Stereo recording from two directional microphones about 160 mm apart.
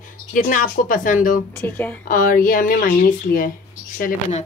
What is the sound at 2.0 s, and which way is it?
Speech, 60° left (ahead or behind).